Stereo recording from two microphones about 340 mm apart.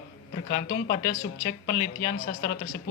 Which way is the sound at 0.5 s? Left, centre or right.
Left.